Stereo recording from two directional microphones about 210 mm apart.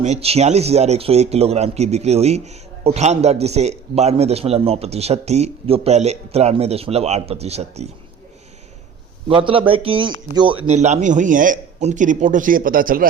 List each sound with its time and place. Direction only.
0.0 s speech: 30° right (ahead or behind)
9.3 s a man's voice: 25° right (ahead or behind); by 13.1 s 40° right (ahead or behind)